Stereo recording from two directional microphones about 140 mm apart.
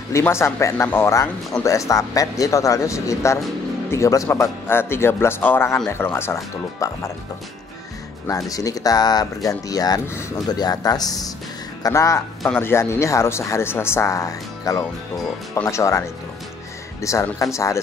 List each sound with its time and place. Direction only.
0.1 s speech: 20° left (ahead or behind)
8.3 s speech: 25° left (ahead or behind)
17.0 s speech: 20° left (ahead or behind)